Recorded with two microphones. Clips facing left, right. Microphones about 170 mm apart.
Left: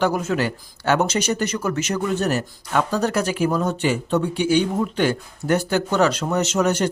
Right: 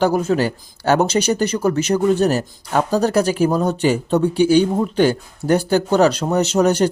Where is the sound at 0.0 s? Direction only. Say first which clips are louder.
Right 4 dB; 35° right (ahead or behind).